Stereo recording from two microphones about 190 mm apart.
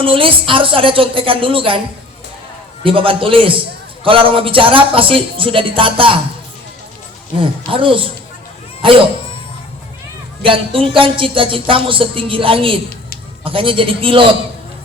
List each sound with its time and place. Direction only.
0.0 s speech: 30° right (ahead or behind)
2.8 s speech: 30° right (ahead or behind)
7.7 s speech: 25° right (ahead or behind)
10.4 s speech: 30° right (ahead or behind)